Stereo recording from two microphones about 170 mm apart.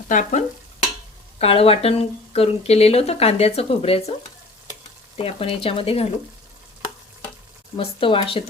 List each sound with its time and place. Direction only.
0.1 s stir: 45° left (ahead or behind)
1.4 s speech: 35° left (ahead or behind)
5.1 s speech: 35° left (ahead or behind)
7.8 s speech: 30° left (ahead or behind)